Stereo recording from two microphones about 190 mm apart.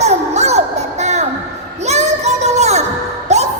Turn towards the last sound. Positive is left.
turn(degrees=-35)  # may be behind; listen again after turning